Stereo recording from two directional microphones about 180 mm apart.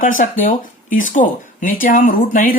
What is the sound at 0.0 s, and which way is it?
Speech, 45° left (ahead or behind).